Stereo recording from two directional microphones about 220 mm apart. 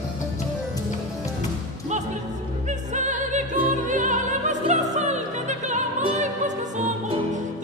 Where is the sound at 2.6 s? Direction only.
35° right (ahead or behind).